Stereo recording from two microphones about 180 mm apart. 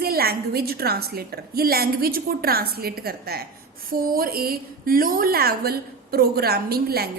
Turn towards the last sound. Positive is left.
turn(degrees=-60)  # may be behind; listen again after turning